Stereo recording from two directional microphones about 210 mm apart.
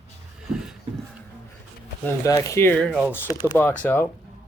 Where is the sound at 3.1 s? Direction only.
20° left (ahead or behind).